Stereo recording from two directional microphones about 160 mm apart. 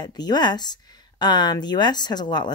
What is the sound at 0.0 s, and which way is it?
Speech, 25° left (ahead or behind).